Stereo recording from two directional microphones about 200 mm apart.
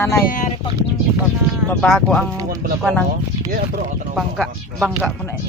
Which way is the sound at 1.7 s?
5° left (ahead or behind).